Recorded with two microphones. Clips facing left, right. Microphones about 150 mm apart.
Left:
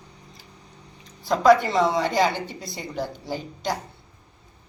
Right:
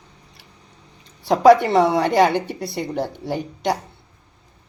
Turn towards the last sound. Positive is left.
turn(degrees=-65)  # may be behind; listen again after turning